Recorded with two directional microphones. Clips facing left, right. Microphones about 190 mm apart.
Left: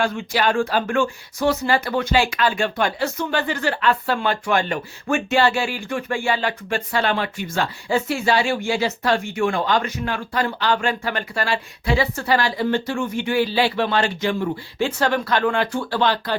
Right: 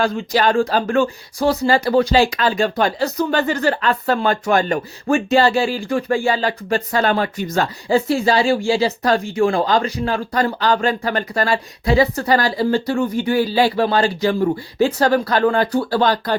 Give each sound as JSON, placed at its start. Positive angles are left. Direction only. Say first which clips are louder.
{"t": 0.0, "sound": "speech", "louder": "right 3 dB", "side_deg": -35}